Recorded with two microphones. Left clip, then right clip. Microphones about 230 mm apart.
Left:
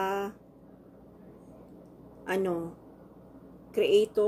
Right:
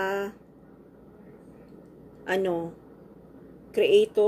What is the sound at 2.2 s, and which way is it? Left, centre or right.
Speech, left.